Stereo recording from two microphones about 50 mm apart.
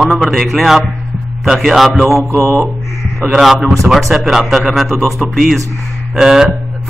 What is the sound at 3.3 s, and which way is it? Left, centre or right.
A man's voice, centre.